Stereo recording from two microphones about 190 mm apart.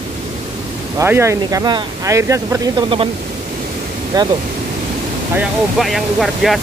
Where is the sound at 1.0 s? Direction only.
15° right (ahead or behind).